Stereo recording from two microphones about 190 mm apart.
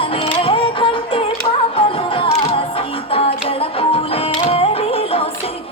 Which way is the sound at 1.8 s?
30° left (ahead or behind).